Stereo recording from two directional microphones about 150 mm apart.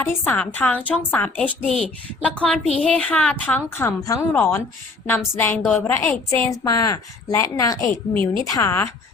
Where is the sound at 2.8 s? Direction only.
5° left (ahead or behind).